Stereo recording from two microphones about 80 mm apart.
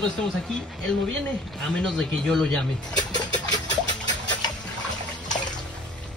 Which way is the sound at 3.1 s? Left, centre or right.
Left.